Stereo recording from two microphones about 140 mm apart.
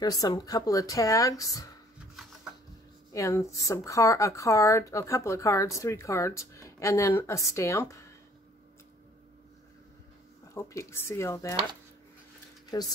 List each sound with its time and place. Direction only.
0.0 s speech: 25° left (ahead or behind)
3.1 s speech: 20° left (ahead or behind)
10.5 s speech: 20° left (ahead or behind)